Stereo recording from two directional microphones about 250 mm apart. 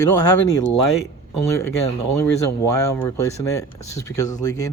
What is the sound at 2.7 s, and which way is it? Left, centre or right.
A man's voice, centre.